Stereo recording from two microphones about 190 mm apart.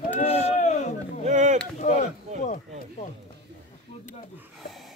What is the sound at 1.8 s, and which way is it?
Speech, 45° left (ahead or behind).